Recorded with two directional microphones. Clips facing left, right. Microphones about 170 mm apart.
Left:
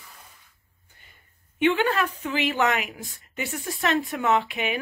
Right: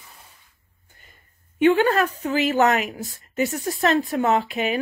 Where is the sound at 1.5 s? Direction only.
40° right (ahead or behind).